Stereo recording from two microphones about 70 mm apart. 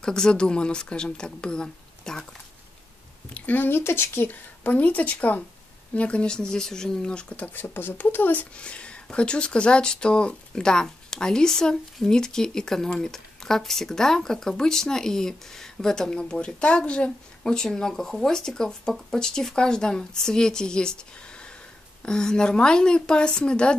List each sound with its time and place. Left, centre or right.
0.0 s speech: centre
3.3 s speech: left
4.6 s speech: left
7.6 s speech: left; by 21.0 s centre
22.0 s speech: centre